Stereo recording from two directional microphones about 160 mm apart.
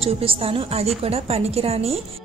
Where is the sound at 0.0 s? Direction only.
35° right (ahead or behind).